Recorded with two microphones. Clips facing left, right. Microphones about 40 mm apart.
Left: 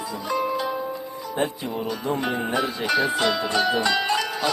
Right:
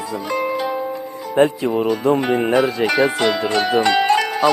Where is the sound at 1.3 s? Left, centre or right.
Right.